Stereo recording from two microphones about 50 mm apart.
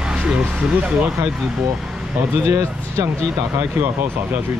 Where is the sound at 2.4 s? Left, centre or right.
Right.